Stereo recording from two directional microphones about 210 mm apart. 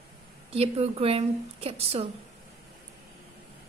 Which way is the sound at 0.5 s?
30° right (ahead or behind).